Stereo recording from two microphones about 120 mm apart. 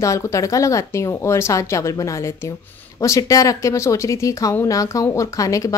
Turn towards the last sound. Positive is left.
turn(degrees=25)  # may be behind; listen again after turning